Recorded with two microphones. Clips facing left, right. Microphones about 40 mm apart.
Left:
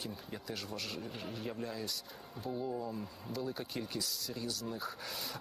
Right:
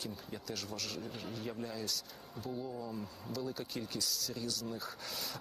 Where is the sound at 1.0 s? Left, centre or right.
Centre.